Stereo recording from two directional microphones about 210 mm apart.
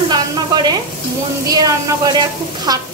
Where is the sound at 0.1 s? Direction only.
20° right (ahead or behind).